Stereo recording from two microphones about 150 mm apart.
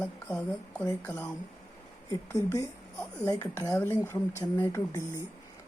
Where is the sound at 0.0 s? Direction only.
10° left (ahead or behind).